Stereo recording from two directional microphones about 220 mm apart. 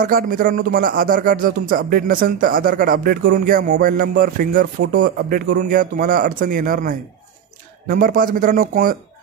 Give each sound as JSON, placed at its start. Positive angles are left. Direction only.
{"t": 0.0, "sound": "speech", "side_deg": -40}